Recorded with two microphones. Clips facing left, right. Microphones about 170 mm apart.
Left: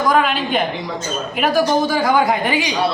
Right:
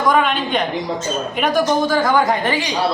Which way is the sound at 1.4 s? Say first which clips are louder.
Left 1 dB; 5° left (ahead or behind).